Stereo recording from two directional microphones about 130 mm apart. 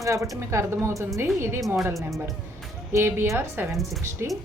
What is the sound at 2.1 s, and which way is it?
Speech, centre (ahead or behind).